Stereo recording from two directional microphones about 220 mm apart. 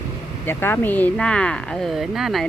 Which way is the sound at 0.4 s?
10° left (ahead or behind).